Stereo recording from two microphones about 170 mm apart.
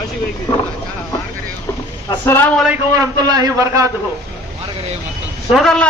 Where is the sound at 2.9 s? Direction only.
20° right (ahead or behind).